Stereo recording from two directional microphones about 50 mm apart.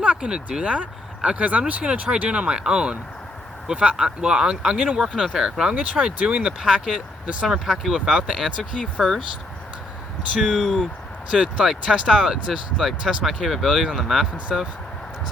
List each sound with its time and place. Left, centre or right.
0.0 s speech: centre
8.8 s speech: centre
10.3 s speech: centre
13.9 s speech: centre